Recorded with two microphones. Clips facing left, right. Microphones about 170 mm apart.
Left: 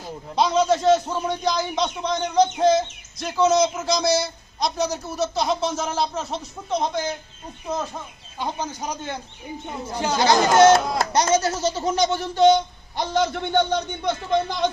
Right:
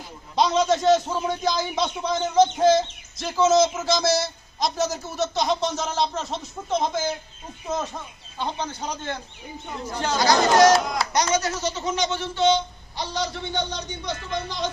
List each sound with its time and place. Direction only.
0.3 s a man's voice: centre (ahead or behind)
8.4 s a man's voice: 10° left (ahead or behind)
10.2 s speech: 25° left (ahead or behind)
11.1 s a sound: 30° left (ahead or behind); by 14.7 s 55° left (ahead or behind)